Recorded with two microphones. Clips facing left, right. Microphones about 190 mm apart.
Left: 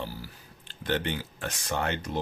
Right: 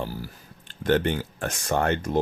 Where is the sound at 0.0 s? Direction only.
45° right (ahead or behind).